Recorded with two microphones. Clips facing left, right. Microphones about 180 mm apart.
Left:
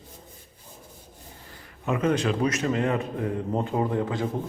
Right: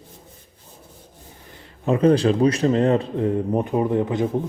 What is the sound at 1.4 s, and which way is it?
A man's voice, 25° right (ahead or behind).